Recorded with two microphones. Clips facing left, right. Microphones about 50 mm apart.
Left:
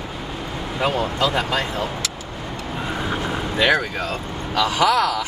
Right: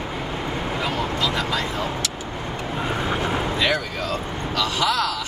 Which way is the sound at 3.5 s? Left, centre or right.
Left.